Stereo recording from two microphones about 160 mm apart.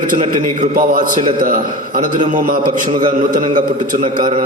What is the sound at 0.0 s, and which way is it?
A man's voice, 55° right (ahead or behind).